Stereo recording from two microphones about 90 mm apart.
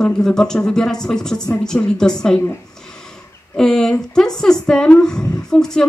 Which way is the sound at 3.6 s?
5° left (ahead or behind).